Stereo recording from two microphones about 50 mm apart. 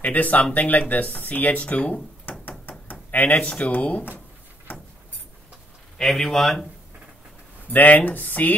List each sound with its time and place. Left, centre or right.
0.0 s speech: left
2.9 s a sound: left
3.4 s speech: left
3.7 s speech: left
5.9 s speech: centre
7.7 s speech: left